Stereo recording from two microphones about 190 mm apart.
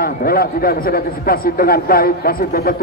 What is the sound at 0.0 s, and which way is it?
A man's voice, 50° left (ahead or behind).